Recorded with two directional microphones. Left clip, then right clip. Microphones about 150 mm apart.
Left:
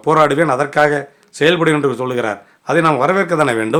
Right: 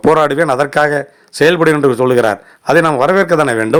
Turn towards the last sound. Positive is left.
turn(degrees=-30)  # may be behind; listen again after turning